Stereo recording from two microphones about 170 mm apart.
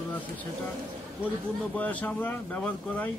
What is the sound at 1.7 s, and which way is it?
A man's voice, 10° left (ahead or behind).